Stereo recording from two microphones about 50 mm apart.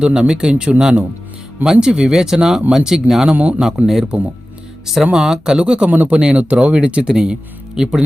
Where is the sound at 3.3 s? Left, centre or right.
Right.